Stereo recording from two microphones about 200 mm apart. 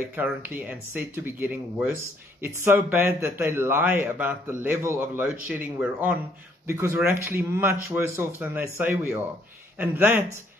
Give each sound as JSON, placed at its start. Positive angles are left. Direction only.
{"t": 0.1, "sound": "a man's voice", "side_deg": -10}